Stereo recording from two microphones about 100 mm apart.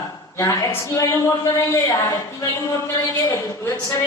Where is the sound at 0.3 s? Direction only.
30° left (ahead or behind).